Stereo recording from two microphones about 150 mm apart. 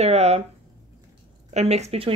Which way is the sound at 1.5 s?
45° right (ahead or behind).